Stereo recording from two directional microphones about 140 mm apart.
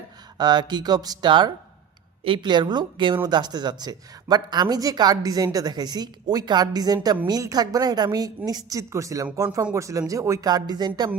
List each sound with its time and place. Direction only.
0.3 s a woman's voice: 30° right (ahead or behind)